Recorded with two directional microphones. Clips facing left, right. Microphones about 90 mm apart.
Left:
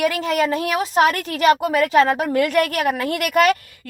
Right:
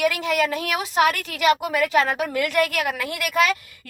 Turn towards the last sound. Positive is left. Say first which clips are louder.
# left 5 dB
turn(degrees=55)  # may be behind; listen again after turning